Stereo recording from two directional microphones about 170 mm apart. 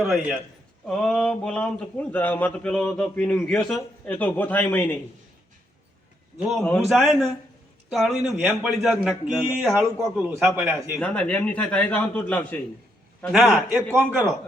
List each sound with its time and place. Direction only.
0.0 s a man's voice: centre (ahead or behind)
6.5 s a man's voice: centre (ahead or behind)
11.0 s speech: 5° left (ahead or behind)
13.3 s a man's voice: centre (ahead or behind)